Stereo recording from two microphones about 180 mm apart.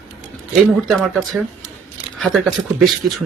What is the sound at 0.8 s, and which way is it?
Speech, centre (ahead or behind).